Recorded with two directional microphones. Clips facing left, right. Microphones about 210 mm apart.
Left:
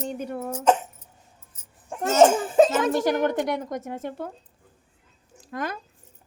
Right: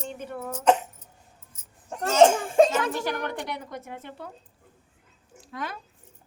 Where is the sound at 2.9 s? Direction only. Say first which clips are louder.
Left 7 dB; 45° left (ahead or behind).